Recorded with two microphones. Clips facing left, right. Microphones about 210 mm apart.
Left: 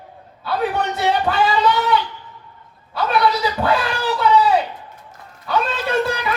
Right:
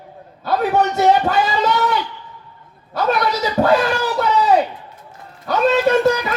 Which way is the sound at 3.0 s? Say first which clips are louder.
Even; 45° right (ahead or behind).